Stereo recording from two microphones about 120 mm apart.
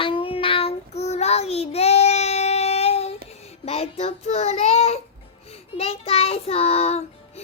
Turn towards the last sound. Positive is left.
turn(degrees=60)  # may be behind; listen again after turning